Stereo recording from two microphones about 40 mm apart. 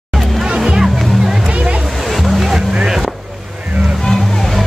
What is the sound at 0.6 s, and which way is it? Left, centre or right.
Music, centre.